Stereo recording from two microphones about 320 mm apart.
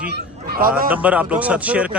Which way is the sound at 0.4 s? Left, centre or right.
Right.